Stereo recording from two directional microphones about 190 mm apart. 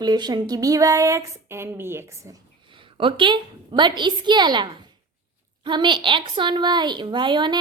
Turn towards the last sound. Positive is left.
turn(degrees=-25)  # may be behind; listen again after turning